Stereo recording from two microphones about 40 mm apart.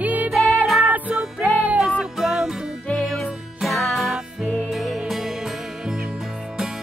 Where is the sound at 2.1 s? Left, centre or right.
Centre.